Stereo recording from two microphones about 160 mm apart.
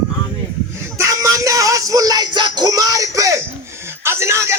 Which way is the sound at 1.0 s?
20° right (ahead or behind).